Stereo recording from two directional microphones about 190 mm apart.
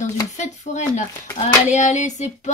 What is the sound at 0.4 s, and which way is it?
Speech, 40° left (ahead or behind).